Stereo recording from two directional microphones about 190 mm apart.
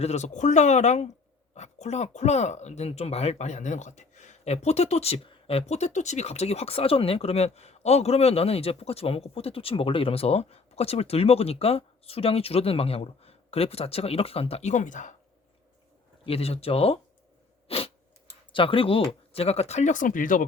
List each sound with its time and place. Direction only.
0.0 s speech: 35° left (ahead or behind)
16.2 s speech: 30° left (ahead or behind)
17.7 s a sound: 30° left (ahead or behind)
18.5 s speech: 30° left (ahead or behind); by 20.4 s 45° left (ahead or behind)